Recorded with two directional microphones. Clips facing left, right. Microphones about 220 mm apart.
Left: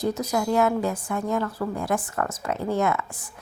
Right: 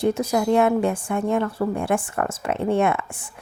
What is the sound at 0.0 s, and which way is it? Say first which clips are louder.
A woman's voice: right 4 dB; 30° right (ahead or behind).